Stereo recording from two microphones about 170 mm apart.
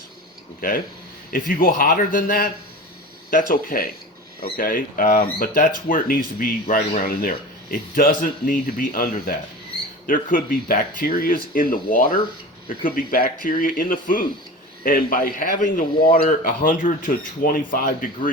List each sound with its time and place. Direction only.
1.3 s a man's voice: 55° left (ahead or behind)